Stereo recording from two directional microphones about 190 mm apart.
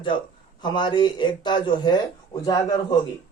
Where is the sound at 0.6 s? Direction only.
25° left (ahead or behind).